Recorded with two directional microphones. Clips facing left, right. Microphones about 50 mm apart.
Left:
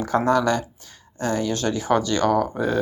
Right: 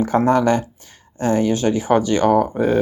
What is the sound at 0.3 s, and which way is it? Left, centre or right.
Speech, right.